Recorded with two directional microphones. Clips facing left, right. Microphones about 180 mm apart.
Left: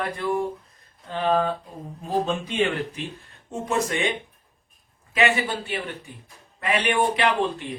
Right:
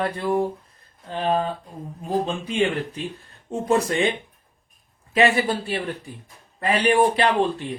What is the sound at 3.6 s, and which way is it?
Speech, 35° right (ahead or behind).